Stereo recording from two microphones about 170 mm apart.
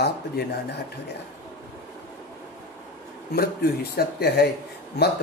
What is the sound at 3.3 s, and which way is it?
Speech, 70° left (ahead or behind).